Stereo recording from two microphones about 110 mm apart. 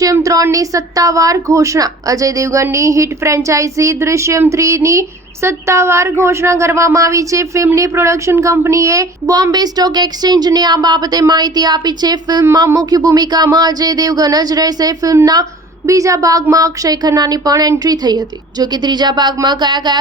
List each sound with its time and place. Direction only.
0.0 s a woman's voice: 30° right (ahead or behind)